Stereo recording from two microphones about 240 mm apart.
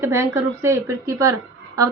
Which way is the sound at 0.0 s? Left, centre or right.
Centre.